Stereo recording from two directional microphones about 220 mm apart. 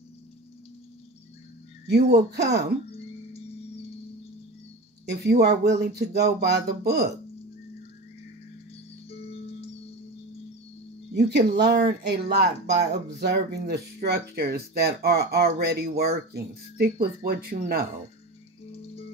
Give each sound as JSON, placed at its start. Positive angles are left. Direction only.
{"t": 2.3, "sound": "speech", "side_deg": -50}
{"t": 5.0, "sound": "speech", "side_deg": -50}
{"t": 11.1, "sound": "speech", "side_deg": -50}